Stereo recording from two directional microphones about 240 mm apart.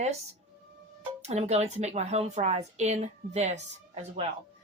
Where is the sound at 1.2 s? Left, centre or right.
Right.